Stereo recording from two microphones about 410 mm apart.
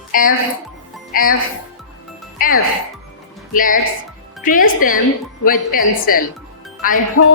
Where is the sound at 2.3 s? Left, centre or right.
Left.